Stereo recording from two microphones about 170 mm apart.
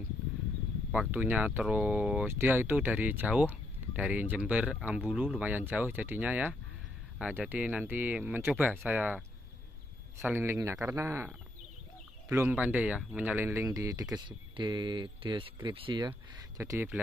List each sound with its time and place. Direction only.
0.9 s speech: 10° right (ahead or behind)
10.2 s speech: 15° right (ahead or behind); by 16.1 s 30° right (ahead or behind)
16.1 s speech: 15° right (ahead or behind)